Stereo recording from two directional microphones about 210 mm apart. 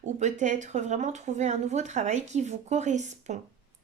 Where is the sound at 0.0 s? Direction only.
35° right (ahead or behind).